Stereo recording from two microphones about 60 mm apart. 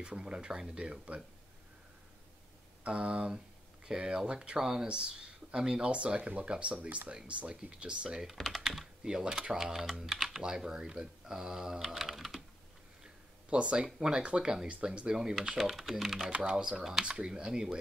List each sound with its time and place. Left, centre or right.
0.0 s speech: centre
2.8 s speech: centre
8.3 s speech: centre
8.6 s speech: centre
10.4 s speech: centre
11.8 s typing: centre
13.0 s a sound: centre
13.8 s speech: centre
16.3 s speech: centre